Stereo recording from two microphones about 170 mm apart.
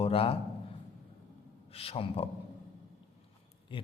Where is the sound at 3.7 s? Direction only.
30° left (ahead or behind).